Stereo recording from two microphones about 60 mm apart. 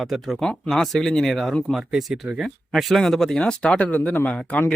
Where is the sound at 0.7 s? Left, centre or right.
Centre; by 4.3 s left.